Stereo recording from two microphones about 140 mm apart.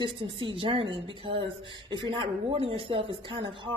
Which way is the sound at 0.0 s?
35° right (ahead or behind).